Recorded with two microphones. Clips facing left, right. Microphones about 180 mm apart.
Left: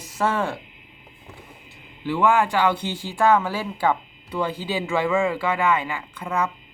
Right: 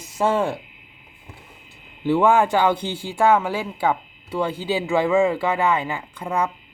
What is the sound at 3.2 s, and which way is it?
Speech, 10° right (ahead or behind).